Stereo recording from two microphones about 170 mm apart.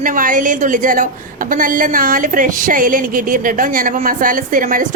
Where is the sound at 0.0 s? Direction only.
50° right (ahead or behind).